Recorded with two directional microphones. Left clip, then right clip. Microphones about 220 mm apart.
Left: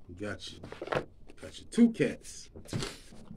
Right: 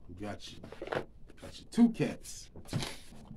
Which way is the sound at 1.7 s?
10° right (ahead or behind).